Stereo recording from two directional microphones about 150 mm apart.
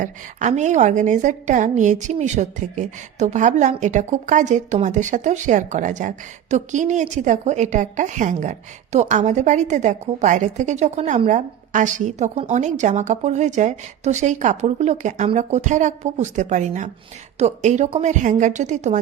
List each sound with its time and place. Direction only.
0.0 s a woman's voice: 55° right (ahead or behind)